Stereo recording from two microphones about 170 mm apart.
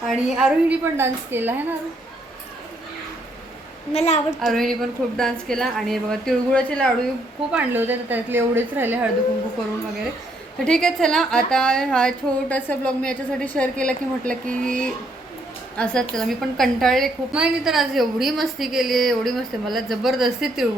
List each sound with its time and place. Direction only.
0.1 s a woman's voice: centre (ahead or behind)
3.9 s a woman's voice: 40° left (ahead or behind)
4.4 s a woman's voice: centre (ahead or behind)
7.5 s a woman's voice: 10° right (ahead or behind)
10.6 s a woman's voice: 5° left (ahead or behind)